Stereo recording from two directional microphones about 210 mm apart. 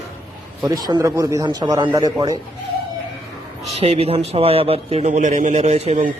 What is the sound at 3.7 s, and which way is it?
A man's voice, 30° right (ahead or behind).